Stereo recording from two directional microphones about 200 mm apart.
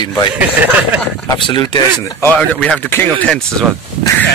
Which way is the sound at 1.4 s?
25° left (ahead or behind).